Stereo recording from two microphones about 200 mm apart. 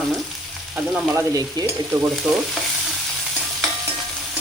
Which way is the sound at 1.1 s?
20° right (ahead or behind).